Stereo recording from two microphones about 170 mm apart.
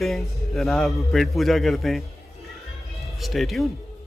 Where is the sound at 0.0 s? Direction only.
Centre (ahead or behind).